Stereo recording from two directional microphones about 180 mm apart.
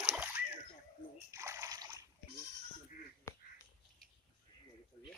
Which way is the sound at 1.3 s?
15° right (ahead or behind).